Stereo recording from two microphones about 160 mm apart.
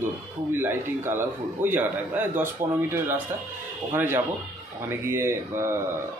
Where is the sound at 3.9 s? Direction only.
15° right (ahead or behind).